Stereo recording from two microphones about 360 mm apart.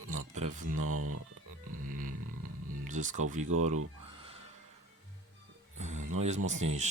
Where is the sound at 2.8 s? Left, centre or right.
Right.